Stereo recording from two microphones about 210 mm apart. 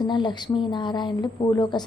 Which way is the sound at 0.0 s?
20° left (ahead or behind).